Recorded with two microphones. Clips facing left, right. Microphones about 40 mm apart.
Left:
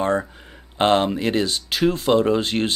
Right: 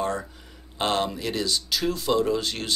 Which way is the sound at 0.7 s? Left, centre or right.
Left.